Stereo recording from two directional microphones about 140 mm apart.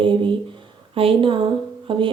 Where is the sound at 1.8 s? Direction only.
35° right (ahead or behind).